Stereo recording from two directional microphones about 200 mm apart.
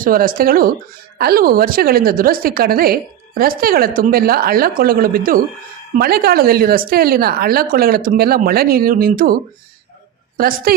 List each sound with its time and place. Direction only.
0.0 s a woman's voice: 45° right (ahead or behind)